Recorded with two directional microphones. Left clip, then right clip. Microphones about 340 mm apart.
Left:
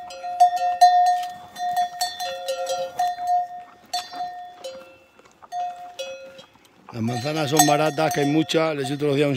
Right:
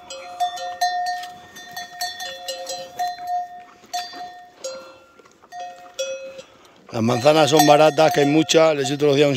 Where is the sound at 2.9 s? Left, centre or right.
Centre.